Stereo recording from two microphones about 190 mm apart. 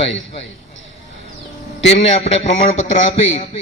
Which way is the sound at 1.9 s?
35° left (ahead or behind).